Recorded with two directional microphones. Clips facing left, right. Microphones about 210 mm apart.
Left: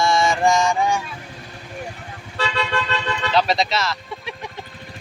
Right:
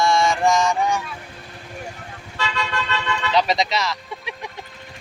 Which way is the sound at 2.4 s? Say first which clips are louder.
Left 3 dB; 30° left (ahead or behind).